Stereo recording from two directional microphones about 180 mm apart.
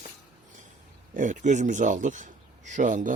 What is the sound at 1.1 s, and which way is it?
Speech, 45° right (ahead or behind).